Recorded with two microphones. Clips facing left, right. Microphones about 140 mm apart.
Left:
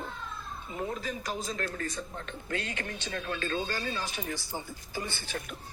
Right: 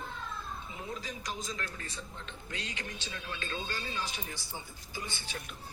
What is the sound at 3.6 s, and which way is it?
Speech, 50° left (ahead or behind).